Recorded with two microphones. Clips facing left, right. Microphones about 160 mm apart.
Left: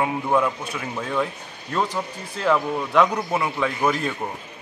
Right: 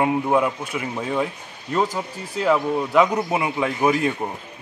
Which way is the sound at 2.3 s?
5° right (ahead or behind).